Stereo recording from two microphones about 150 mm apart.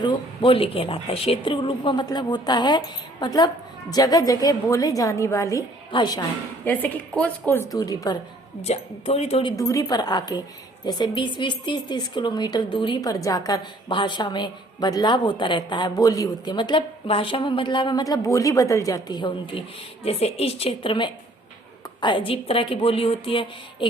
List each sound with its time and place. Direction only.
0.0 s a woman's voice: 35° left (ahead or behind)
5.9 s a woman's voice: 30° left (ahead or behind)
6.7 s a woman's voice: 10° left (ahead or behind)
7.7 s a woman's voice: 25° left (ahead or behind)
8.6 s a woman's voice: 45° left (ahead or behind)
9.6 s a woman's voice: 20° left (ahead or behind)
20.1 s a woman's voice: 45° left (ahead or behind)